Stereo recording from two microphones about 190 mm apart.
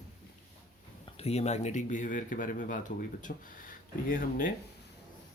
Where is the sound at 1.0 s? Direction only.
30° left (ahead or behind); by 4.5 s 50° left (ahead or behind).